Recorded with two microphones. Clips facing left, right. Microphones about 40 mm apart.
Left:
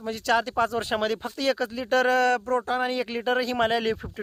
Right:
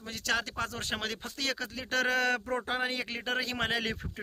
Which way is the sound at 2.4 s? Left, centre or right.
Centre.